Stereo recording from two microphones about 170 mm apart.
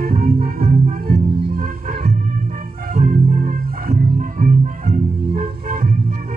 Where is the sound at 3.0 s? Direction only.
50° right (ahead or behind).